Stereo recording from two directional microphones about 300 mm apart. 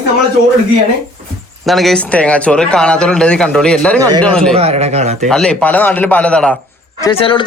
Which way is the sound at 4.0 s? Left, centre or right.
Centre.